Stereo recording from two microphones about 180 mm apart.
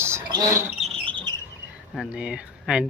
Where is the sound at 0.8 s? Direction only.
30° right (ahead or behind).